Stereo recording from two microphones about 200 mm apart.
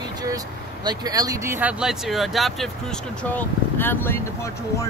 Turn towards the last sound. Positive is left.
turn(degrees=10)  # may be behind; listen again after turning